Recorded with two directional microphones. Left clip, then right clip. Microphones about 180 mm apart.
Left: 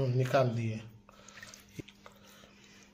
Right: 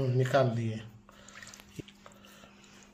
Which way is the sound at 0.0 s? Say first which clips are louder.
Right 2 dB; 5° left (ahead or behind).